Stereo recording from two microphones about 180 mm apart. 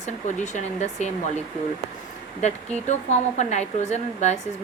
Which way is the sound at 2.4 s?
40° left (ahead or behind).